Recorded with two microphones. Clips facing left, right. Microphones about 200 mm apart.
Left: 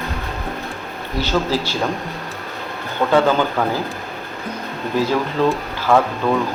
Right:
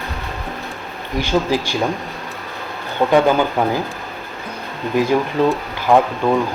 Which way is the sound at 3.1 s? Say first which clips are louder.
Right 1 dB; 15° right (ahead or behind).